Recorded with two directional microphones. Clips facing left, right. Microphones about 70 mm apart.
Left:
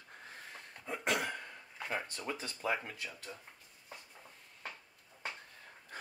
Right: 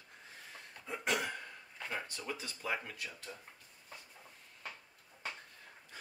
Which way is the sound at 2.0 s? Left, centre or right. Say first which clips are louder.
Left 2 dB; left.